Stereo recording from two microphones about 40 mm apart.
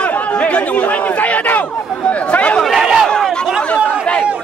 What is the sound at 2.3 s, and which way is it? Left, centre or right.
Chatter, left.